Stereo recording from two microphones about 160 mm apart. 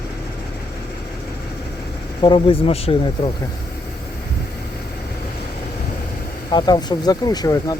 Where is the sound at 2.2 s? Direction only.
35° left (ahead or behind).